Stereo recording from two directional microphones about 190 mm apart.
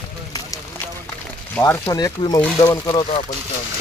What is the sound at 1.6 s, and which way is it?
Speech, 15° left (ahead or behind).